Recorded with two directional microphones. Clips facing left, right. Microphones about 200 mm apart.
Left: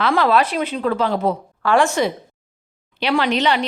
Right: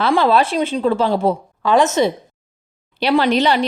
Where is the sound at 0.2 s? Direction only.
30° right (ahead or behind).